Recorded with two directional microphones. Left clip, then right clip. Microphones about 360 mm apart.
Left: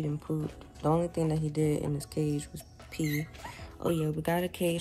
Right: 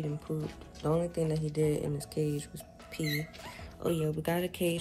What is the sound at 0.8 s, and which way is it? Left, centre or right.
Speech, centre.